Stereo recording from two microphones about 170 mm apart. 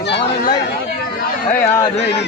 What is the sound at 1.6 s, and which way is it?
Speech, 15° left (ahead or behind).